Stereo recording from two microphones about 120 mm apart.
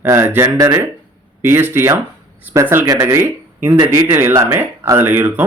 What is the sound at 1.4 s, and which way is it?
Speech, 20° right (ahead or behind).